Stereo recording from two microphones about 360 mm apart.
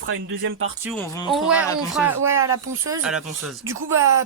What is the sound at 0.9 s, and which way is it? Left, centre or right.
Speech, centre.